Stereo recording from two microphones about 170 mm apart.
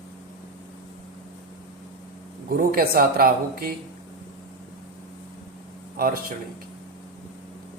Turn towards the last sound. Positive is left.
turn(degrees=-60)  # may be behind; listen again after turning